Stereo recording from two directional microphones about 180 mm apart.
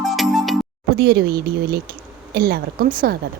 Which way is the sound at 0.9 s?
60° right (ahead or behind).